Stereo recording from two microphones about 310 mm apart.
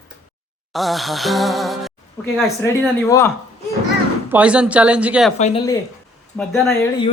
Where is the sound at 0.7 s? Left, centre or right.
Centre.